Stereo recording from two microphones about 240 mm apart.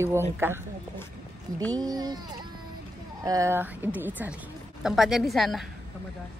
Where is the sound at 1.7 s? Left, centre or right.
Centre.